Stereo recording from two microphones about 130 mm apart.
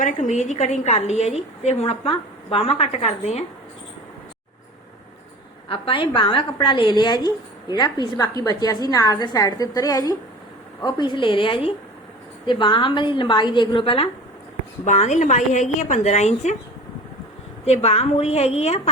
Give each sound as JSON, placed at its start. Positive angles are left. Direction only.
{"t": 0.0, "sound": "a woman's voice", "side_deg": 70}
{"t": 5.6, "sound": "a woman's voice", "side_deg": 45}
{"t": 14.8, "sound": "speech", "side_deg": 65}
{"t": 17.7, "sound": "a woman's voice", "side_deg": 55}